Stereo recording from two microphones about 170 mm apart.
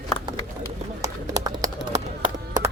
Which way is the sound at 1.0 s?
20° right (ahead or behind).